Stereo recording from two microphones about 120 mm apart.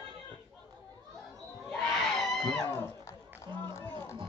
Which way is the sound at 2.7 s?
20° left (ahead or behind).